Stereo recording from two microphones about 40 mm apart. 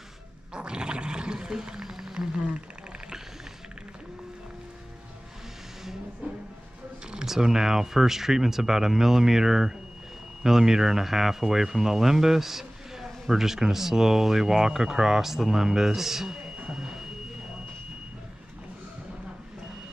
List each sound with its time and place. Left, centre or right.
0.6 s gargling: right
1.9 s a sound: centre
7.2 s speech: centre